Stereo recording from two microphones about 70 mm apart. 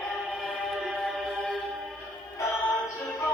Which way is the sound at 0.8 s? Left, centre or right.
Centre.